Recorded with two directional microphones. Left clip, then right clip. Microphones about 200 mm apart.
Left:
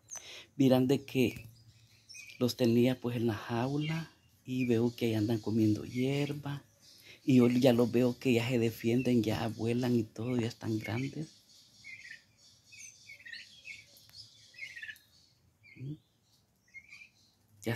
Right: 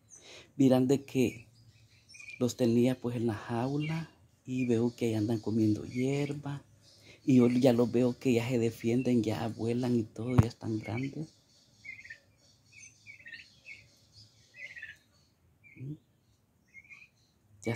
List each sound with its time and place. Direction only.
0.2 s speech: 5° right (ahead or behind)